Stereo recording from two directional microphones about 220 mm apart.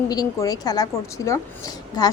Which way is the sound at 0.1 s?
15° left (ahead or behind).